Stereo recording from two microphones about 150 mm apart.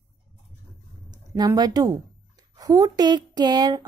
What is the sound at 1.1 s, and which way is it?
A woman's voice, 25° right (ahead or behind).